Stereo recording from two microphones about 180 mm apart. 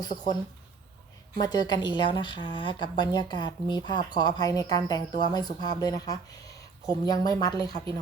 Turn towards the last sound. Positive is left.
turn(degrees=20)  # may be behind; listen again after turning